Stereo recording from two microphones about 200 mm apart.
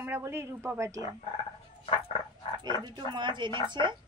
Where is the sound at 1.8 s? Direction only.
25° left (ahead or behind).